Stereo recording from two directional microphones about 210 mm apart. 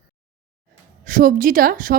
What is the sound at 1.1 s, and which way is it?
Speech, 40° right (ahead or behind).